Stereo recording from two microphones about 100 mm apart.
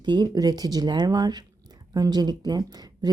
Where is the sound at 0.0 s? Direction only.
50° right (ahead or behind).